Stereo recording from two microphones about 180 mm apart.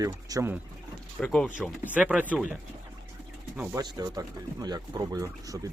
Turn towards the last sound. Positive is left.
turn(degrees=-20)  # may be behind; listen again after turning